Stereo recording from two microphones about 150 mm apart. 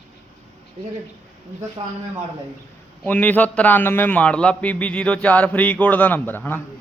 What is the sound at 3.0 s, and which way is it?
A man's voice, 10° left (ahead or behind).